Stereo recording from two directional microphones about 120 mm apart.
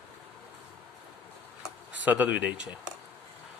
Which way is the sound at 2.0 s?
15° right (ahead or behind).